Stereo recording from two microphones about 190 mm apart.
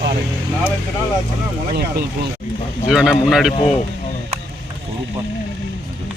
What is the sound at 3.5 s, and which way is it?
Speech, 30° left (ahead or behind).